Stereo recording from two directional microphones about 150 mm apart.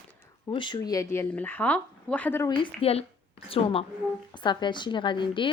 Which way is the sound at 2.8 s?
40° left (ahead or behind).